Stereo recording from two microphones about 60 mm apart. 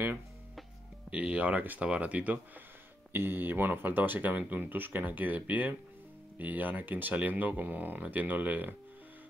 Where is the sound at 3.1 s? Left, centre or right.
Right.